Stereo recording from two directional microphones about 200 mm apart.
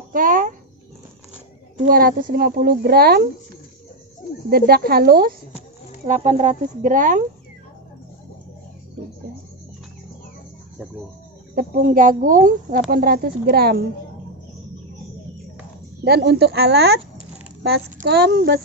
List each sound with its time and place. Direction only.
0.1 s a sound: 45° right (ahead or behind)
1.9 s speech: 45° right (ahead or behind)
4.5 s speech: 50° right (ahead or behind)
6.0 s speech: 35° right (ahead or behind)
11.5 s speech: 45° right (ahead or behind)
16.0 s speech: 55° right (ahead or behind)